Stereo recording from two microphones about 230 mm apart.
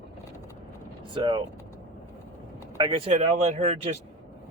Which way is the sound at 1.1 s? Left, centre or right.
Right.